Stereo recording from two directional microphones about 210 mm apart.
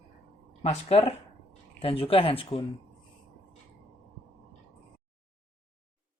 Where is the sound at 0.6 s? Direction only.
30° left (ahead or behind).